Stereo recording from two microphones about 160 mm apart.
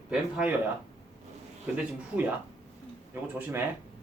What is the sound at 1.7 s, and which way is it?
Speech, 10° right (ahead or behind).